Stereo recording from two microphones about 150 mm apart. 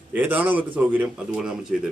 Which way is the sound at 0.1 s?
10° right (ahead or behind).